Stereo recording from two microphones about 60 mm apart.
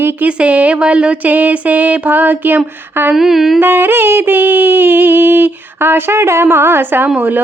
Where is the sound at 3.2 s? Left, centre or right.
Centre.